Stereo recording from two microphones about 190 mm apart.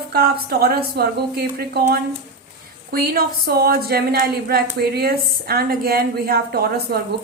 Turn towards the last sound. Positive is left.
turn(degrees=-55)  # may be behind; listen again after turning